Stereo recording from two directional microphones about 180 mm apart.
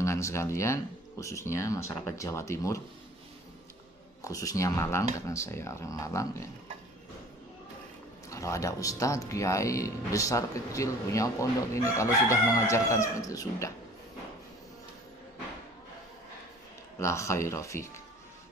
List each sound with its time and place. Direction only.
0.0 s speech: 15° left (ahead or behind)
4.2 s speech: 20° left (ahead or behind)
8.3 s speech: 15° left (ahead or behind)
17.0 s speech: 15° left (ahead or behind)